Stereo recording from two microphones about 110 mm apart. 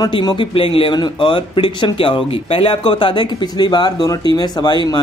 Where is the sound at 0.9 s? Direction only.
45° left (ahead or behind).